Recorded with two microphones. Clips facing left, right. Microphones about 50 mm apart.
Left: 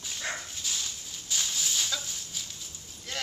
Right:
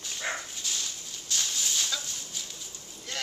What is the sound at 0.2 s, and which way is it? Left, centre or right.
Dog, centre.